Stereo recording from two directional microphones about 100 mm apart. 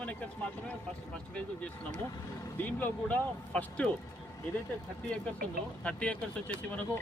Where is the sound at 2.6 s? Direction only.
20° left (ahead or behind).